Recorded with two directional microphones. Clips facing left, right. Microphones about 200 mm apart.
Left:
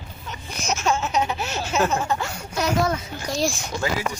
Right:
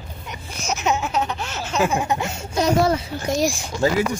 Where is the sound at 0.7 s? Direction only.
15° right (ahead or behind).